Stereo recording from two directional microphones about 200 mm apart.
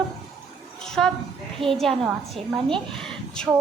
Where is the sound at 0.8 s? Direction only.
5° left (ahead or behind).